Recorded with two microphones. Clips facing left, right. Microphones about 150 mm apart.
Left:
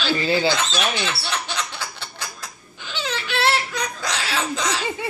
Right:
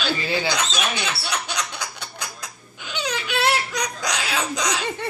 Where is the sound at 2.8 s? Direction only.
10° right (ahead or behind).